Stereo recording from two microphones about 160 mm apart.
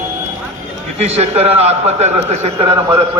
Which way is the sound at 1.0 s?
40° right (ahead or behind).